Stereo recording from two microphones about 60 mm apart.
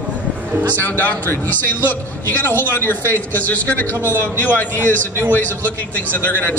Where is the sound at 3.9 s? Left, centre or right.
Right.